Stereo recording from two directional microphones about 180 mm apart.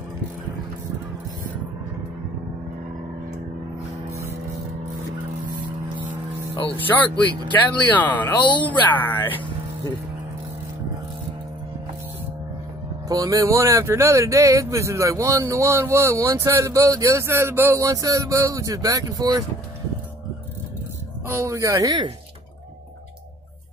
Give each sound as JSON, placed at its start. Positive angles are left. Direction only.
{"t": 7.5, "sound": "speech", "side_deg": 10}
{"t": 8.4, "sound": "speech", "side_deg": 25}
{"t": 9.0, "sound": "speech", "side_deg": 10}
{"t": 13.1, "sound": "speech", "side_deg": -20}
{"t": 21.3, "sound": "speech", "side_deg": -15}